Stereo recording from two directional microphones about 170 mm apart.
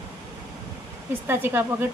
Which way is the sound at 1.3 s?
10° right (ahead or behind).